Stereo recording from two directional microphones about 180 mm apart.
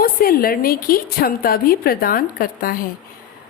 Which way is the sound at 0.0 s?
55° left (ahead or behind).